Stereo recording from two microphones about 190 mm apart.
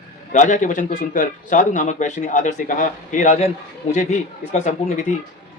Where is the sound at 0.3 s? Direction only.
40° left (ahead or behind).